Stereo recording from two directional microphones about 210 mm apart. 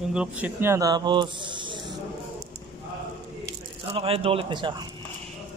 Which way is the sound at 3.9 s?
25° right (ahead or behind).